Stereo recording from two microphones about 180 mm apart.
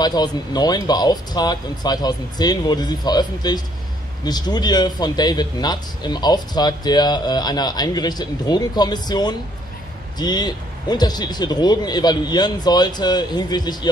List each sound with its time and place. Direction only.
0.0 s speech: 20° left (ahead or behind)